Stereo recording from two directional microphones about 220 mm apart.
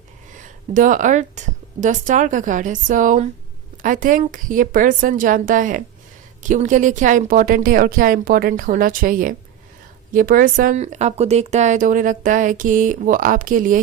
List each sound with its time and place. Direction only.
0.3 s a woman's voice: 35° right (ahead or behind)